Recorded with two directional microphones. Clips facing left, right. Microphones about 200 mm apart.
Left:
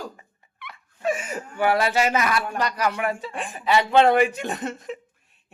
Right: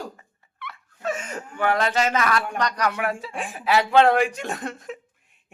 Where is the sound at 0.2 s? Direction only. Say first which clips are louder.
Right 3 dB; 15° left (ahead or behind).